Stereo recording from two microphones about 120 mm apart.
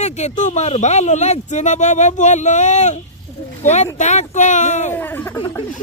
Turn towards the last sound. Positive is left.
turn(degrees=15)  # may be behind; listen again after turning